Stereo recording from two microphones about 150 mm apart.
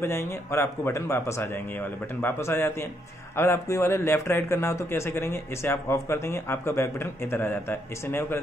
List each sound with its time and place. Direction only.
0.0 s a man's voice: 15° left (ahead or behind)